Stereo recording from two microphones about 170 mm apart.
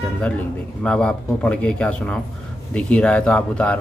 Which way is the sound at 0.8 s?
5° left (ahead or behind).